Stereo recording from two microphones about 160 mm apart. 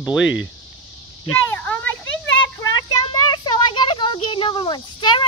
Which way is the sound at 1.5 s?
15° left (ahead or behind).